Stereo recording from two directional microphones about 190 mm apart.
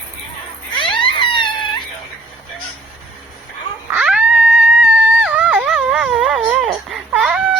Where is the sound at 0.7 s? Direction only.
25° left (ahead or behind).